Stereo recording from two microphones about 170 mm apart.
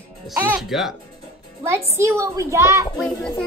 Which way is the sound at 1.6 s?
15° right (ahead or behind).